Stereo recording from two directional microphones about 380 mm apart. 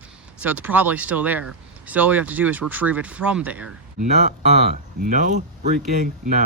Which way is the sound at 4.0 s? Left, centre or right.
Centre.